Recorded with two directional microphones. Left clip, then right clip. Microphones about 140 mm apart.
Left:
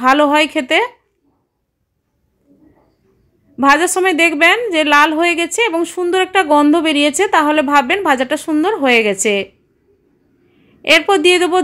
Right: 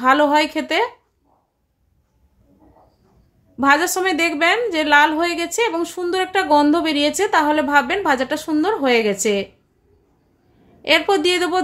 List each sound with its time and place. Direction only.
0.0 s a woman's voice: 25° left (ahead or behind)
3.5 s a woman's voice: 20° left (ahead or behind)
10.8 s a woman's voice: 20° left (ahead or behind)